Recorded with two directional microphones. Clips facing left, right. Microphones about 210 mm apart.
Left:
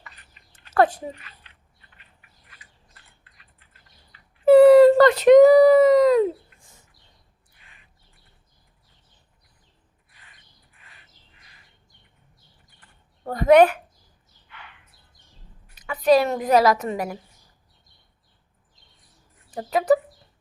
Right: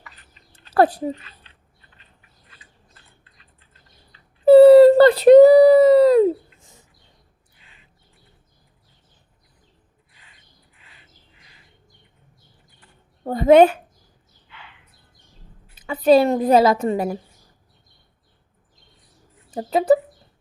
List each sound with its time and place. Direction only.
0.3 s a sound: 35° right (ahead or behind)
13.2 s a woman's voice: 25° right (ahead or behind)
15.7 s a woman's voice: 30° right (ahead or behind)
19.5 s a woman's voice: 30° right (ahead or behind)